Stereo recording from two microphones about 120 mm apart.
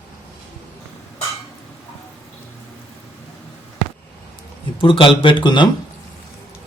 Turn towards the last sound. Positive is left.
turn(degrees=40)  # may be behind; listen again after turning